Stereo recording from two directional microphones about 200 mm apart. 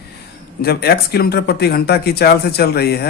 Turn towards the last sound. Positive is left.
turn(degrees=50)  # may be behind; listen again after turning